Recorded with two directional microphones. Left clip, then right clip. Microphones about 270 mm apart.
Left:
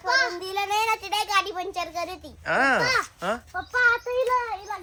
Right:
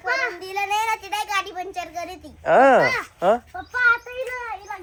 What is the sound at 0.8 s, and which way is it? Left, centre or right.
Child singing, left.